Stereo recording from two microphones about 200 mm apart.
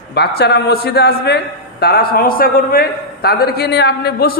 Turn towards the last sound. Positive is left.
turn(degrees=50)  # may be behind; listen again after turning